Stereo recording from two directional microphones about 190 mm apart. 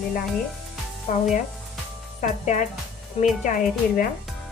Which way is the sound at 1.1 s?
45° left (ahead or behind).